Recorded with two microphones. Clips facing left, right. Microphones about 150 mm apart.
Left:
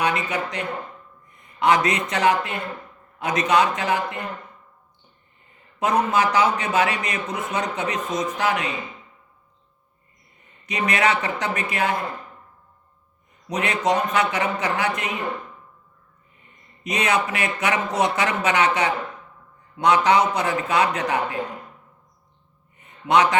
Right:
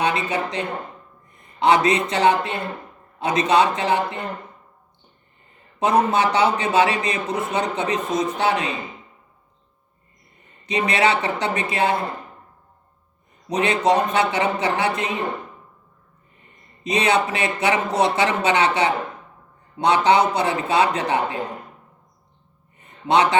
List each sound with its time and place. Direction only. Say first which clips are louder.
0.0 s speech: right 2 dB; 30° right (ahead or behind)
5.8 s a man's voice: right 2 dB; 30° right (ahead or behind)
10.7 s speech: right 2 dB; 30° right (ahead or behind)
13.5 s speech: right 3 dB; 30° right (ahead or behind)
16.8 s speech: right 3 dB; 30° right (ahead or behind)
23.0 s speech: right 1 dB; 30° right (ahead or behind)